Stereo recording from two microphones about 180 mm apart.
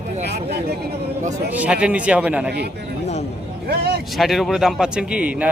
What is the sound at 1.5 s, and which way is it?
A man's voice, 10° right (ahead or behind).